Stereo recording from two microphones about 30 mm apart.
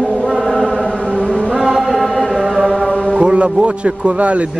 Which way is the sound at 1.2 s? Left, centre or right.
Left.